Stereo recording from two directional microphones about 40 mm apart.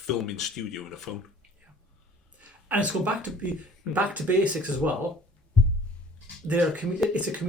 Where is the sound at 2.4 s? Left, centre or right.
Right.